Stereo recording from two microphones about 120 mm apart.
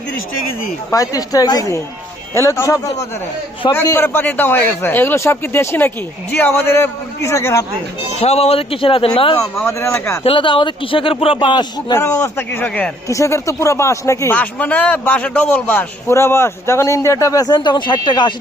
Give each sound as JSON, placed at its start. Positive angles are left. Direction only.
{"t": 0.9, "sound": "a man's voice", "side_deg": 30}
{"t": 8.2, "sound": "speech", "side_deg": 60}
{"t": 9.4, "sound": "speech", "side_deg": 5}
{"t": 9.8, "sound": "a man's voice", "side_deg": 25}
{"t": 10.2, "sound": "speech", "side_deg": 45}
{"t": 11.9, "sound": "speech", "side_deg": 20}
{"t": 13.1, "sound": "a man's voice", "side_deg": 25}
{"t": 14.3, "sound": "a man's voice", "side_deg": 10}